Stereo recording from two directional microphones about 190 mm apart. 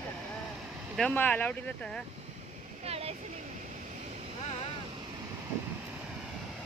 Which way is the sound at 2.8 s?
30° right (ahead or behind).